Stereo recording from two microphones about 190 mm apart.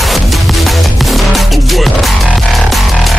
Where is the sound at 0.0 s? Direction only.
Centre (ahead or behind).